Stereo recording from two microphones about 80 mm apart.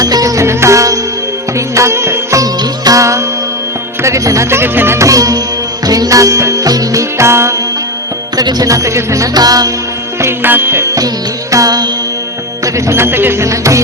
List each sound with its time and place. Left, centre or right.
0.0 s music: right
2.4 s music: right
4.9 s music: right
7.2 s music: right
8.4 s music: right
9.3 s music: right
10.2 s music: right
11.5 s music: right
12.6 s music: right